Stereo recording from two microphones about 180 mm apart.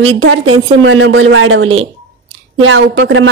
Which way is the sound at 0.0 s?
90° right.